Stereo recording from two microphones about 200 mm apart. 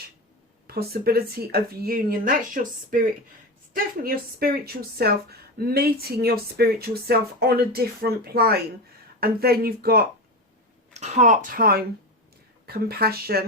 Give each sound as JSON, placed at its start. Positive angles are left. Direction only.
{"t": 0.7, "sound": "speech", "side_deg": -50}
{"t": 10.9, "sound": "speech", "side_deg": -35}